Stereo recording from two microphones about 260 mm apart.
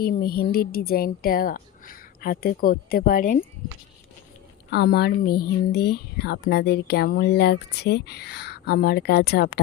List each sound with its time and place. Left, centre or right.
0.0 s speech: left
4.7 s speech: left